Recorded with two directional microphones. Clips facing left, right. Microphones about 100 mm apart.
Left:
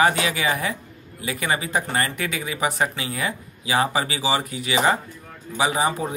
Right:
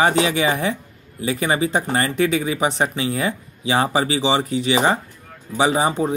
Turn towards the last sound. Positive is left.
turn(degrees=-25)  # may be behind; listen again after turning